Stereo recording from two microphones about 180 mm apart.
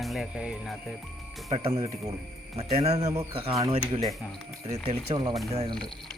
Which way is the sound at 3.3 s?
35° right (ahead or behind).